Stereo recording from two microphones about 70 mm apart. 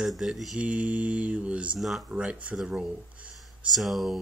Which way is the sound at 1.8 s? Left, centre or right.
Centre.